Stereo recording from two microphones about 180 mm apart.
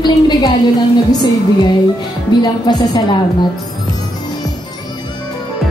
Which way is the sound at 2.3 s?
25° left (ahead or behind).